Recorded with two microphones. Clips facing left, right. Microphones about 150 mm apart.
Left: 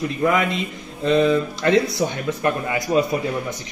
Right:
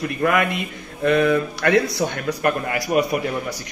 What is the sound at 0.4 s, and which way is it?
Speech, 60° right (ahead or behind).